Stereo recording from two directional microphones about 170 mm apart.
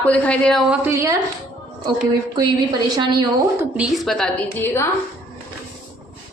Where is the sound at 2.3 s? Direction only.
25° right (ahead or behind).